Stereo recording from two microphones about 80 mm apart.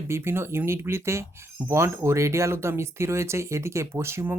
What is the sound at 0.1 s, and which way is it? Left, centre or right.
Speech, right.